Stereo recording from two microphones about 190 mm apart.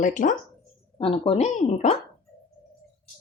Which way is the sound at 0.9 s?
30° left (ahead or behind).